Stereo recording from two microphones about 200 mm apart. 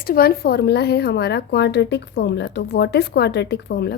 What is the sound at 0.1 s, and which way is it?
A woman's voice, 50° left (ahead or behind).